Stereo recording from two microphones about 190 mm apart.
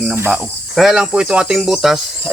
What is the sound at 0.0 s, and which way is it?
Speech, 5° right (ahead or behind).